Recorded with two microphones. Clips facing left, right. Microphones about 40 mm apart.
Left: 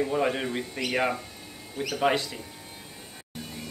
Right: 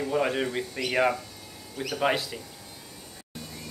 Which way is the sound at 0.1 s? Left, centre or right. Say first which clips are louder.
Even; centre.